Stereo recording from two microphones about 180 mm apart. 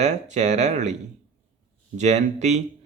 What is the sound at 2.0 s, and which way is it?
Speech, 40° right (ahead or behind).